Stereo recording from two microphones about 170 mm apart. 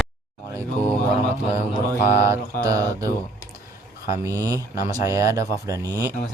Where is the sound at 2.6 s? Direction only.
20° right (ahead or behind).